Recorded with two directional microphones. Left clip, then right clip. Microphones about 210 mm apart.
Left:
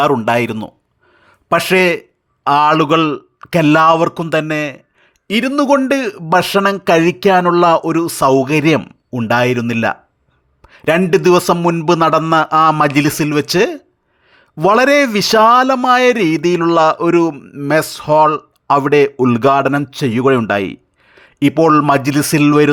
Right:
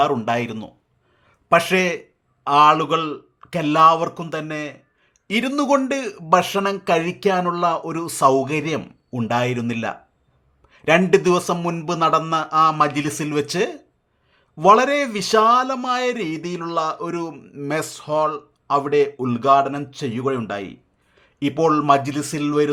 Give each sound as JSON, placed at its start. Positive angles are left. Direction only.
{"t": 0.0, "sound": "speech", "side_deg": 25}
{"t": 5.3, "sound": "speech", "side_deg": 15}
{"t": 8.8, "sound": "speech", "side_deg": 20}
{"t": 10.6, "sound": "a sound", "side_deg": 25}
{"t": 11.0, "sound": "speech", "side_deg": 25}
{"t": 17.3, "sound": "speech", "side_deg": 20}